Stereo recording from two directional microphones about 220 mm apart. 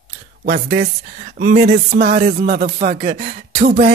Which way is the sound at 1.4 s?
50° right (ahead or behind).